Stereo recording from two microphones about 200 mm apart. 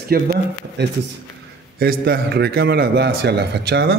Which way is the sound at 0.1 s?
50° right (ahead or behind).